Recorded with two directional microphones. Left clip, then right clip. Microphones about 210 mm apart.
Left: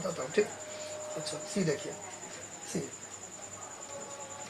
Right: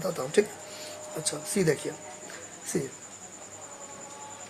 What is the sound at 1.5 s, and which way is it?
Speech, 40° right (ahead or behind).